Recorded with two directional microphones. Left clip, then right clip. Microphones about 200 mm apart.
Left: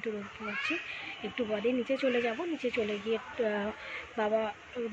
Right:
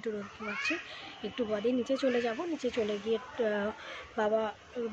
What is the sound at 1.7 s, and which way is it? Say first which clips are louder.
Speech: even; 10° right (ahead or behind).